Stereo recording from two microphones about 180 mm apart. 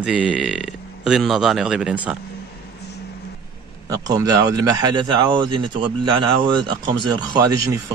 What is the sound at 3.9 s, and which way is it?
Speech, 20° right (ahead or behind).